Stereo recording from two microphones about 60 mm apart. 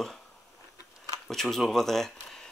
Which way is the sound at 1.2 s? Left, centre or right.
Centre.